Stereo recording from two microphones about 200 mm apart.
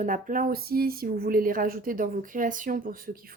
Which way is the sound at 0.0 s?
40° right (ahead or behind).